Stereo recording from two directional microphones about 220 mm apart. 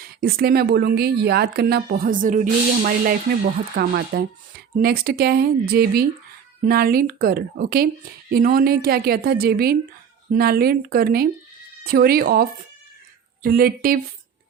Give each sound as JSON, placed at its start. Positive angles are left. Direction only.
{"t": 0.0, "sound": "speech", "side_deg": -40}